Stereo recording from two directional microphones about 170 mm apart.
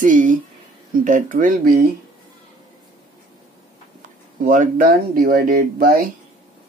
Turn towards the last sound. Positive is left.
turn(degrees=-60)  # may be behind; listen again after turning